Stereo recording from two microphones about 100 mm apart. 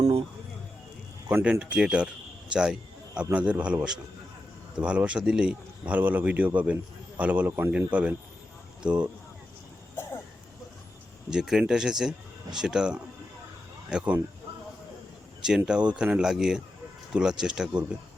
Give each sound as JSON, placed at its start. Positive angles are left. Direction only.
{"t": 1.5, "sound": "a man's voice", "side_deg": -10}
{"t": 4.8, "sound": "a man's voice", "side_deg": -10}
{"t": 9.9, "sound": "a sound", "side_deg": 25}
{"t": 11.3, "sound": "a man's voice", "side_deg": -5}
{"t": 15.4, "sound": "a man's voice", "side_deg": -5}